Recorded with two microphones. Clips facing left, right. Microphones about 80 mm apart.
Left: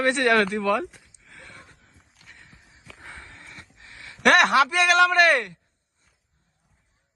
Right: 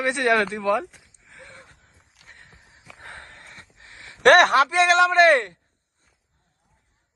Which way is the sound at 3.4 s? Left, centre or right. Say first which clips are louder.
Even; right.